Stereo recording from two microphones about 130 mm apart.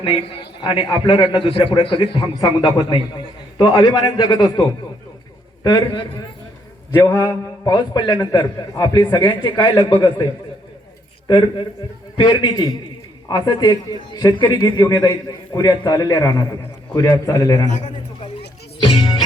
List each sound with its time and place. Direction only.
0.0 s a man's voice: 45° left (ahead or behind)
5.6 s a man's voice: 35° left (ahead or behind)
7.0 s a man's voice: 20° left (ahead or behind)
11.3 s a man's voice: 35° left (ahead or behind)
17.7 s a man's voice: 70° left (ahead or behind)
18.2 s music: 45° left (ahead or behind)